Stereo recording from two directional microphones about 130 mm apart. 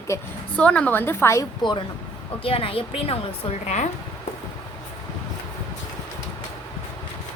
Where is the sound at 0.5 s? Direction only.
10° left (ahead or behind).